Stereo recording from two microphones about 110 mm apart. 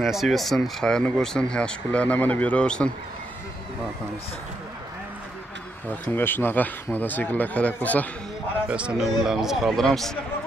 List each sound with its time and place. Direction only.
0.0 s speech: centre (ahead or behind)
6.1 s speech: 20° left (ahead or behind)
8.6 s speech: 10° right (ahead or behind)